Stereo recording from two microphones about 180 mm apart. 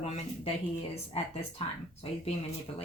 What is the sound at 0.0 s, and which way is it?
Speech, 35° left (ahead or behind).